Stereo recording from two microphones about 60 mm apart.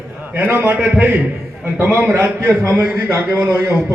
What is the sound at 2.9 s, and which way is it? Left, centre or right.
Speech, right.